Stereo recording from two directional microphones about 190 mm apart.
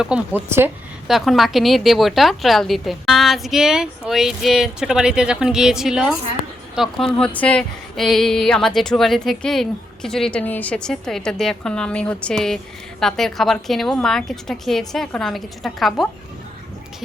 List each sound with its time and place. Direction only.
0.0 s speech: 10° right (ahead or behind)
1.0 s speech: centre (ahead or behind)